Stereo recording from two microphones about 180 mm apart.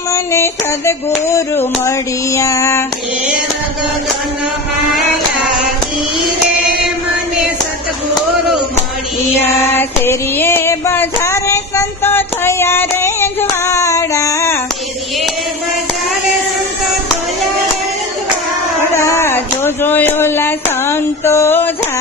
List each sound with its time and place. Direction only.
0.1 s music: 15° left (ahead or behind)
1.3 s child singing: 15° left (ahead or behind)
9.4 s music: 15° left (ahead or behind)
18.8 s a sound: 15° left (ahead or behind)